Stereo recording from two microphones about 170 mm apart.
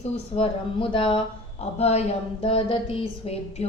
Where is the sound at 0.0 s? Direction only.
35° left (ahead or behind).